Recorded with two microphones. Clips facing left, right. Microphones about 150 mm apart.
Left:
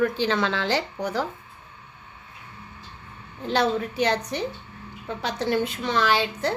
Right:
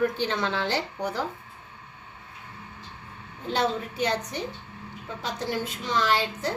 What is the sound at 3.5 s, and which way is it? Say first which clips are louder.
A woman's voice: left 3 dB; 75° left (ahead or behind).